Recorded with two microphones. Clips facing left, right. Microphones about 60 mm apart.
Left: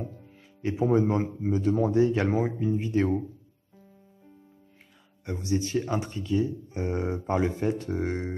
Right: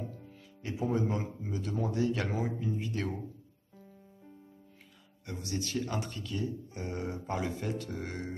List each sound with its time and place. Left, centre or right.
0.6 s speech: left
5.2 s speech: left